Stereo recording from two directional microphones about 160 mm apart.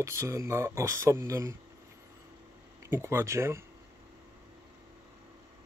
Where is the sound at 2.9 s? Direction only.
15° right (ahead or behind).